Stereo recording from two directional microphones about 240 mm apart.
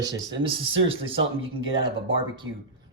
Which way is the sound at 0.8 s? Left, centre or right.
Right.